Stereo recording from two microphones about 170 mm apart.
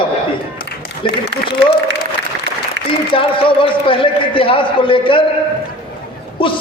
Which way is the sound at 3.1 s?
30° left (ahead or behind).